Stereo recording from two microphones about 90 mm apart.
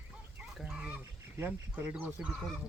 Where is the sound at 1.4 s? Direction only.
15° right (ahead or behind).